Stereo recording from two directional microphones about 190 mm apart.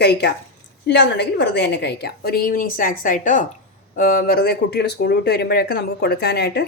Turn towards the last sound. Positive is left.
turn(degrees=55)  # may be behind; listen again after turning